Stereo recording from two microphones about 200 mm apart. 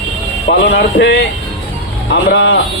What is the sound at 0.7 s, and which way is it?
Speech, 60° left (ahead or behind).